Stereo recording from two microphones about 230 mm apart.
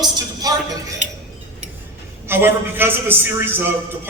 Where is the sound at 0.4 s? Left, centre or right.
Centre.